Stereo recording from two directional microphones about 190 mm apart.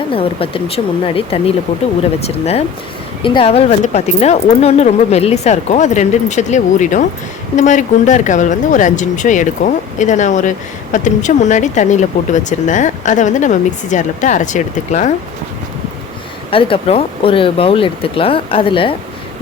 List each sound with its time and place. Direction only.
0.1 s speech: 30° left (ahead or behind)
16.5 s speech: 30° left (ahead or behind)